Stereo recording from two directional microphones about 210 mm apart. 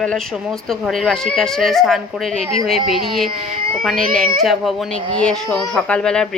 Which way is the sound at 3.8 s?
Centre (ahead or behind).